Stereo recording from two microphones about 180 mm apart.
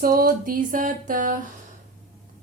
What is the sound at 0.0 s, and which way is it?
A woman's voice, 55° right (ahead or behind).